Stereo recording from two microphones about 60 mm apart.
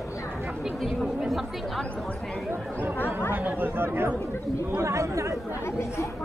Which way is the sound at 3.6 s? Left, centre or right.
Right.